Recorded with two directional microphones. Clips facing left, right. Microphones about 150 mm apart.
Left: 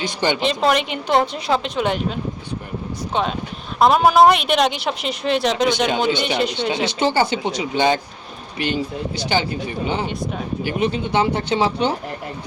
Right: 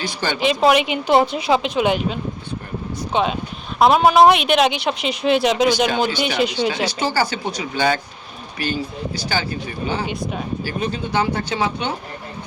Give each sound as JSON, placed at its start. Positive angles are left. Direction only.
{"t": 0.0, "sound": "speech", "side_deg": 20}
{"t": 0.3, "sound": "a woman's voice", "side_deg": -10}
{"t": 6.1, "sound": "speech", "side_deg": 25}
{"t": 6.3, "sound": "a woman's voice", "side_deg": 0}
{"t": 6.8, "sound": "speech", "side_deg": 20}
{"t": 10.1, "sound": "a woman's voice", "side_deg": 0}
{"t": 10.6, "sound": "speech", "side_deg": 20}